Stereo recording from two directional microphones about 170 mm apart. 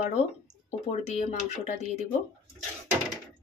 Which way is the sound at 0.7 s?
40° left (ahead or behind).